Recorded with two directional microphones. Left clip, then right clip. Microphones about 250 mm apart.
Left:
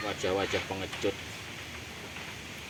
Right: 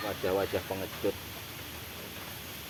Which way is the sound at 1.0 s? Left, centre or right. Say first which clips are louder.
Even; left.